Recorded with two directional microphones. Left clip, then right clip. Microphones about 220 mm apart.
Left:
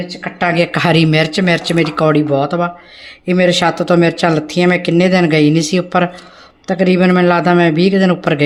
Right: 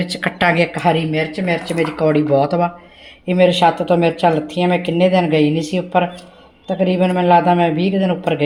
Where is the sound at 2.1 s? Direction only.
10° left (ahead or behind).